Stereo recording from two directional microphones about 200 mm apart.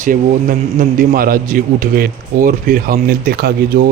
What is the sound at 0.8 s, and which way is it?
A man's voice, 45° right (ahead or behind).